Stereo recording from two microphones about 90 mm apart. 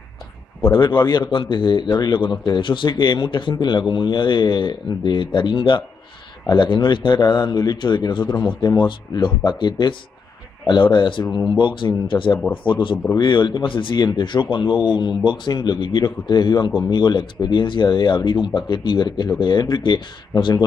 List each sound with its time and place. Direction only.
0.7 s speech: 65° left (ahead or behind)
13.9 s speech: 60° left (ahead or behind)